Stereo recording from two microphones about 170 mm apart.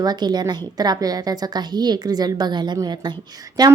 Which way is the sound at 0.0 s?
25° right (ahead or behind).